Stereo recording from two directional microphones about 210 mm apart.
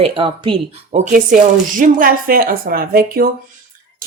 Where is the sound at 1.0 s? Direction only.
40° right (ahead or behind).